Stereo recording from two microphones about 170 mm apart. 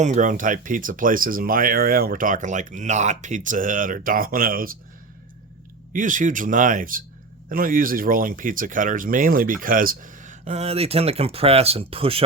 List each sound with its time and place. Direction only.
0.0 s speech: 45° right (ahead or behind)
5.9 s speech: 50° right (ahead or behind); by 12.2 s 35° right (ahead or behind)